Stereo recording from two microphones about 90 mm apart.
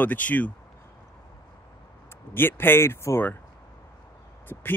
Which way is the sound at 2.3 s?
25° left (ahead or behind).